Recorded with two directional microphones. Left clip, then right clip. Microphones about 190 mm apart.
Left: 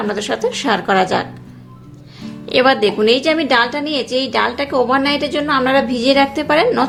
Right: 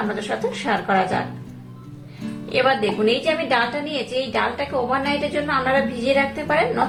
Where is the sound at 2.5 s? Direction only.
50° left (ahead or behind).